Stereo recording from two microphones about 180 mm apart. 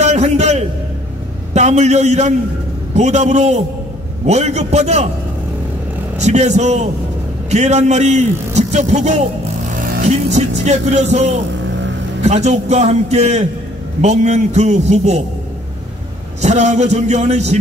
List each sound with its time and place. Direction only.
0.0 s a sound: 40° right (ahead or behind)
1.5 s a man's voice: 40° right (ahead or behind)
6.1 s a man's voice: 40° right (ahead or behind)
16.3 s a man's voice: 40° right (ahead or behind)